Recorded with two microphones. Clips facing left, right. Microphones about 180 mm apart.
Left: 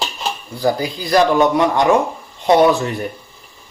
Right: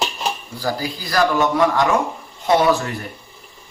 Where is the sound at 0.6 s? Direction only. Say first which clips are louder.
Left 9 dB; 20° left (ahead or behind).